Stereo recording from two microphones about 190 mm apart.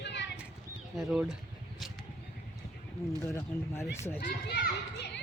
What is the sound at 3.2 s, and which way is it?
Speech, 15° left (ahead or behind).